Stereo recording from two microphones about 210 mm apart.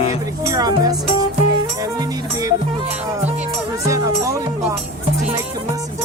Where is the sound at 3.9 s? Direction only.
15° right (ahead or behind).